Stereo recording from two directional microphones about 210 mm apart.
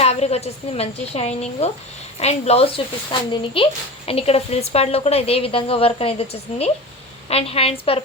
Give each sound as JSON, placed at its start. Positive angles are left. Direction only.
{"t": 0.0, "sound": "speech", "side_deg": 30}